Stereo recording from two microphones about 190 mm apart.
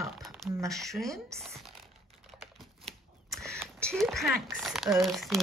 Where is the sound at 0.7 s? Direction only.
Centre (ahead or behind).